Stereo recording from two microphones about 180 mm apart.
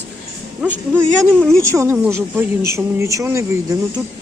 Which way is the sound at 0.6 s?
10° right (ahead or behind).